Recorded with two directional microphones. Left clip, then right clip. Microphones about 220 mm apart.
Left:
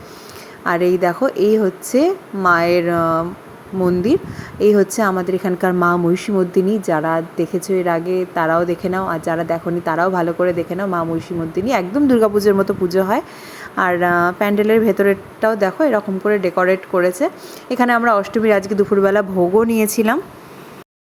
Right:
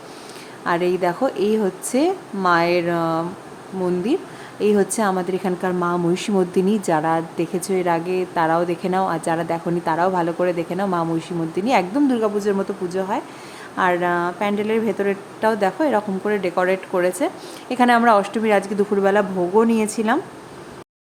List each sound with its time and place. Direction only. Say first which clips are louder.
0.6 s a woman's voice: left 4 dB; 15° left (ahead or behind)
6.1 s a woman's voice: left 3 dB; 5° left (ahead or behind)